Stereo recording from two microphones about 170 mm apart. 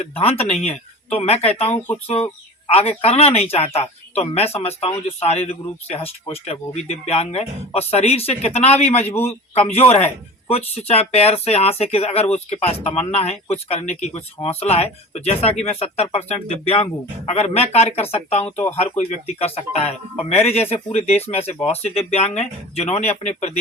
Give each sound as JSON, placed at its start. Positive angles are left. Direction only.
{"t": 0.0, "sound": "speech", "side_deg": 35}
{"t": 18.4, "sound": "speech", "side_deg": 10}
{"t": 18.9, "sound": "speech", "side_deg": 35}